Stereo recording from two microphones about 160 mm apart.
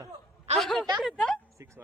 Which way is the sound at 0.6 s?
5° left (ahead or behind).